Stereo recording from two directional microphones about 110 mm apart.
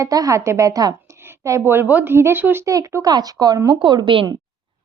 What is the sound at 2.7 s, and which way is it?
Speech, 35° right (ahead or behind).